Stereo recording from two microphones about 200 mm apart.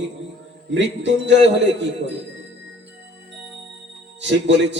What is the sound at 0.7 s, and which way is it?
Speech, 60° right (ahead or behind).